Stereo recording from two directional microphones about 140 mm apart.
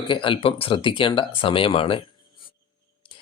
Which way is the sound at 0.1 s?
35° left (ahead or behind).